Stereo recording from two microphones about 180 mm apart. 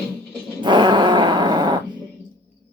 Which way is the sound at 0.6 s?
25° right (ahead or behind).